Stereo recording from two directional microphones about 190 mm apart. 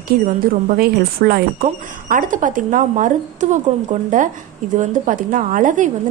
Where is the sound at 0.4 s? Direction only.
55° right (ahead or behind).